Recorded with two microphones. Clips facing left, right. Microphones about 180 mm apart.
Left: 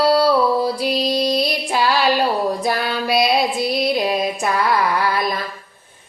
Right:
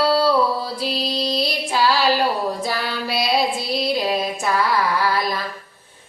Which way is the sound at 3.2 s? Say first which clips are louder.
Left 2 dB; 15° left (ahead or behind).